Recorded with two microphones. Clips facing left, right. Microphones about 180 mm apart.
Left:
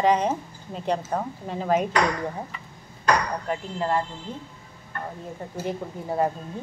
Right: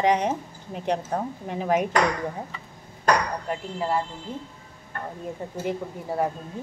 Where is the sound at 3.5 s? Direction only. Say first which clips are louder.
Left 2 dB; 5° right (ahead or behind).